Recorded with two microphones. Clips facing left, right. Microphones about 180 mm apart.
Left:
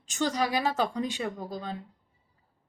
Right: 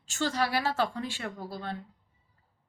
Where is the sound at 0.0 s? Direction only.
15° left (ahead or behind).